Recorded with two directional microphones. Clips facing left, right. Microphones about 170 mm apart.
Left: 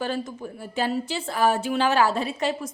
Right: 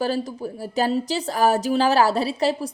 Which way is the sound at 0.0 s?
35° right (ahead or behind).